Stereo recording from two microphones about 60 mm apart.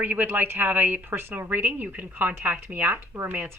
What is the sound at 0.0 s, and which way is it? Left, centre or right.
A woman's voice, right.